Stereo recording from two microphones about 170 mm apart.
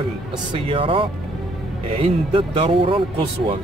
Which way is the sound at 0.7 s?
30° right (ahead or behind).